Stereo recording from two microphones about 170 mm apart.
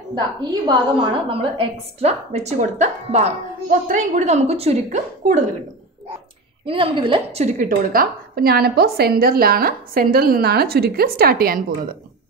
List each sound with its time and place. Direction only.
0.1 s a woman's voice: 25° right (ahead or behind); by 5.4 s 45° right (ahead or behind)
6.6 s a woman's voice: 30° right (ahead or behind); by 12.0 s 55° right (ahead or behind)